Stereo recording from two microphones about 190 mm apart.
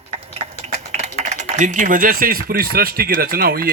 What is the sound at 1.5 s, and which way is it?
A man's voice, 40° right (ahead or behind).